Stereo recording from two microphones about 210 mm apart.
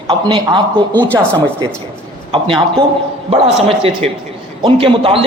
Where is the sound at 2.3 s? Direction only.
25° right (ahead or behind).